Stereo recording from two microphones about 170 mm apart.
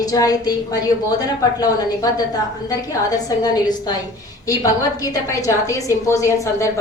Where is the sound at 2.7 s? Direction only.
20° left (ahead or behind).